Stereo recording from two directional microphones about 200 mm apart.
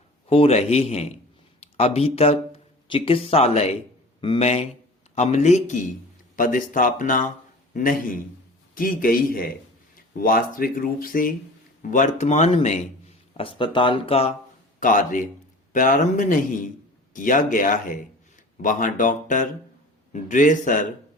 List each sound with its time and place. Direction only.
0.3 s a man's voice: 30° left (ahead or behind)
14.8 s a man's voice: 40° left (ahead or behind)